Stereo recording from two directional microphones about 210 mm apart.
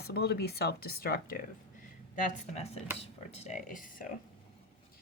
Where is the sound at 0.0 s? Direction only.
50° left (ahead or behind).